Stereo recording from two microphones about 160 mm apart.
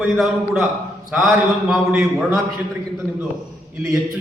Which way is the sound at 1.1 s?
15° right (ahead or behind).